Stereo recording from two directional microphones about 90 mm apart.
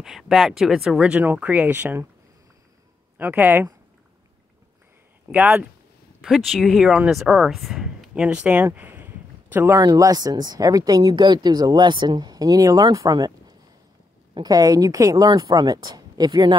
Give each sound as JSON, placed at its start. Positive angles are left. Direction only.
{"t": 0.0, "sound": "speech", "side_deg": 0}
{"t": 1.2, "sound": "speech", "side_deg": -20}
{"t": 3.2, "sound": "speech", "side_deg": -20}
{"t": 5.3, "sound": "speech", "side_deg": -15}
{"t": 6.2, "sound": "speech", "side_deg": 0}
{"t": 8.1, "sound": "speech", "side_deg": -15}
{"t": 8.7, "sound": "a sound", "side_deg": -20}
{"t": 9.8, "sound": "speech", "side_deg": -40}